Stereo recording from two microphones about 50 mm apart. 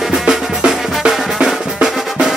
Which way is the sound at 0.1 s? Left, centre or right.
Centre.